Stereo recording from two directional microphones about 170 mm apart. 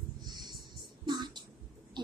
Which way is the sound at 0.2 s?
25° right (ahead or behind).